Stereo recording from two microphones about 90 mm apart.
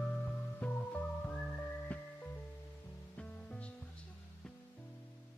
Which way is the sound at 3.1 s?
15° left (ahead or behind).